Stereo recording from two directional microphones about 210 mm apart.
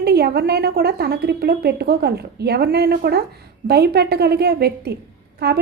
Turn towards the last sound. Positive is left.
turn(degrees=-50)  # may be behind; listen again after turning